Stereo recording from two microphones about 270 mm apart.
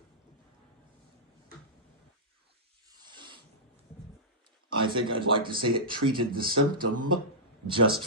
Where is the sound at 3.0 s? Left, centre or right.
Centre.